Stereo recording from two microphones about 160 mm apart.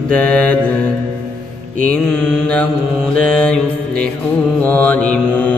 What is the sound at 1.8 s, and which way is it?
Mantra, 5° left (ahead or behind).